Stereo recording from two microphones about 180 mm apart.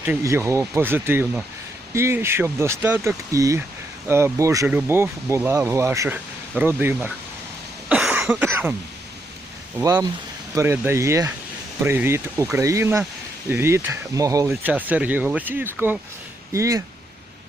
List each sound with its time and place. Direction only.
0.0 s speech: 15° right (ahead or behind)
7.9 s cough: 5° right (ahead or behind)
9.7 s speech: 20° right (ahead or behind)
14.5 s speech: 10° right (ahead or behind)